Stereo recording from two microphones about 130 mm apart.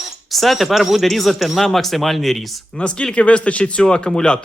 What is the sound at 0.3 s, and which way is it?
Speech, centre (ahead or behind).